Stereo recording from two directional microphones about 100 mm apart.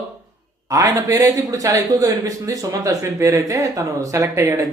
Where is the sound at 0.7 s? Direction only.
30° right (ahead or behind).